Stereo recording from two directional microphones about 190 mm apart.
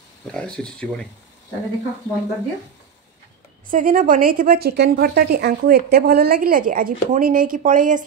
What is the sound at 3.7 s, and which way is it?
A woman's voice, 45° right (ahead or behind).